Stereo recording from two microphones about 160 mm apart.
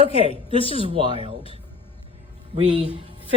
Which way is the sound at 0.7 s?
35° right (ahead or behind).